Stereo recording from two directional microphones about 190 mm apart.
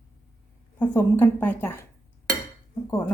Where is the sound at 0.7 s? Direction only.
10° left (ahead or behind).